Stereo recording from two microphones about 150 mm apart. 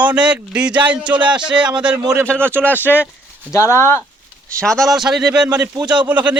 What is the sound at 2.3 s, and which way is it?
Speech, 5° left (ahead or behind).